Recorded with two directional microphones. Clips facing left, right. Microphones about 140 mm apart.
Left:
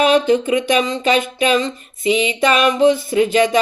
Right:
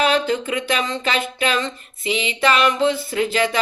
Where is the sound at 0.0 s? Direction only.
20° left (ahead or behind).